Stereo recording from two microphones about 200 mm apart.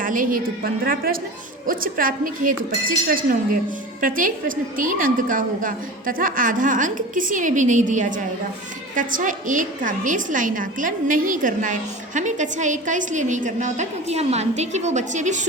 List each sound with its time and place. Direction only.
0.0 s a woman's voice: 45° right (ahead or behind)